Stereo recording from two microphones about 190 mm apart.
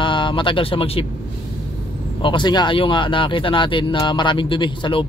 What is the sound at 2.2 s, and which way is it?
Speech, 25° left (ahead or behind).